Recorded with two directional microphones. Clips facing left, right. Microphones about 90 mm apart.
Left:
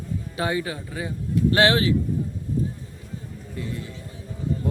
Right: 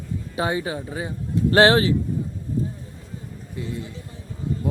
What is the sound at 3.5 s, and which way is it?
Speech, 25° right (ahead or behind).